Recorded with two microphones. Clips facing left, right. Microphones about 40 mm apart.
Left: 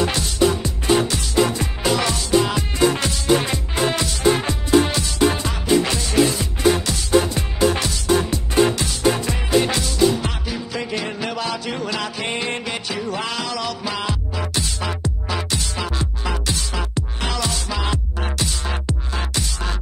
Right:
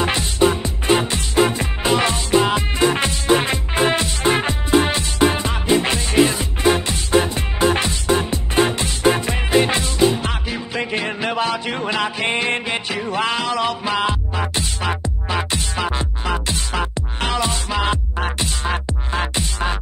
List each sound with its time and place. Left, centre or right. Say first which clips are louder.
0.0 s music: right 1 dB; right